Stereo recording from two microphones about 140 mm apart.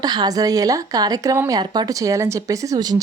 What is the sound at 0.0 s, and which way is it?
A woman's voice, 30° right (ahead or behind).